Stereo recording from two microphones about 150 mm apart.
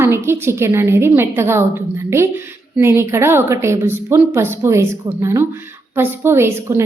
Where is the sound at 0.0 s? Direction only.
15° right (ahead or behind).